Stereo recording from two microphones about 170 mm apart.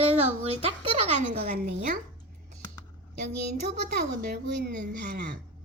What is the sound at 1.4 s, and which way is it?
Speech, 60° right (ahead or behind).